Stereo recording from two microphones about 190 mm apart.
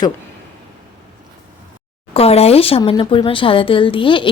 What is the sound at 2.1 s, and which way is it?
Speech, 30° left (ahead or behind).